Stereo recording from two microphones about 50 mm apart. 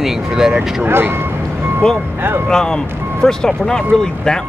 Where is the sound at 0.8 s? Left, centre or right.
Right.